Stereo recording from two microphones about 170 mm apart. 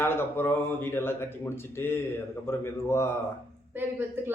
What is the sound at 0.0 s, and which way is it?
A man's voice, 15° left (ahead or behind).